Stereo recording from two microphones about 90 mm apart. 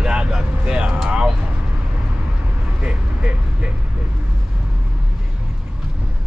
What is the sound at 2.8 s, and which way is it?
Vehicle, 10° right (ahead or behind).